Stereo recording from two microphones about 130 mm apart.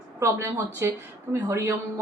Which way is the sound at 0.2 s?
20° right (ahead or behind).